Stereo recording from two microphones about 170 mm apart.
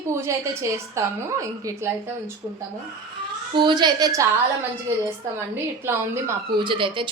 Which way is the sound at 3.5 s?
25° right (ahead or behind).